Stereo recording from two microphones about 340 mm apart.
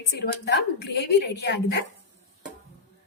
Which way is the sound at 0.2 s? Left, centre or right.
Left.